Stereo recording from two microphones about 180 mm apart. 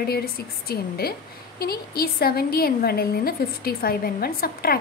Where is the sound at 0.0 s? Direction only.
60° left (ahead or behind).